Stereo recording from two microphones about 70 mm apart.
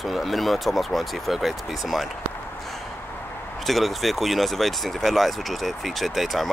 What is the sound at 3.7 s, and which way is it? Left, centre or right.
Speech, centre.